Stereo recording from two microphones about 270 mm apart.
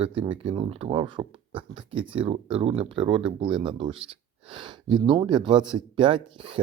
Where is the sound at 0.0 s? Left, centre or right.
Right.